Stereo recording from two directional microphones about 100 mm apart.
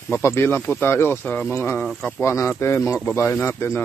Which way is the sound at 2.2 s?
25° left (ahead or behind).